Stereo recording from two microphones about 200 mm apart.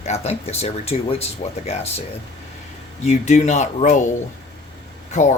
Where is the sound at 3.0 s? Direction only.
35° left (ahead or behind).